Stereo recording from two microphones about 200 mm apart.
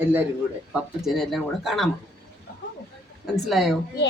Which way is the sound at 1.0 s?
Centre (ahead or behind).